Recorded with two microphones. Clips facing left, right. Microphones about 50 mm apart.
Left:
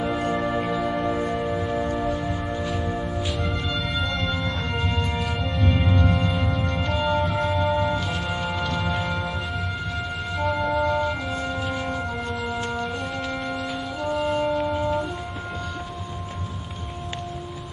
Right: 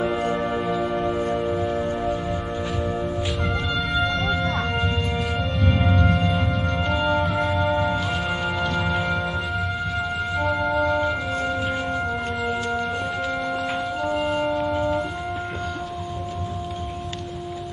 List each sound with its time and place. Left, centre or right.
0.0 s music: centre
12.6 s music: centre
13.2 s music: centre